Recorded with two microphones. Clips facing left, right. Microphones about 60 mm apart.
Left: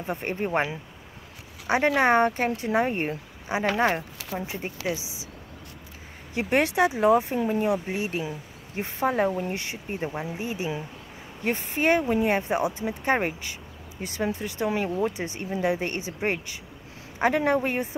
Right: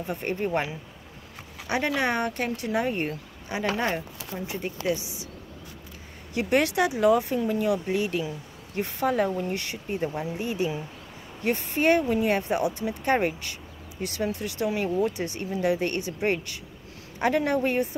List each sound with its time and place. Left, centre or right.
0.0 s speech: left
6.3 s speech: left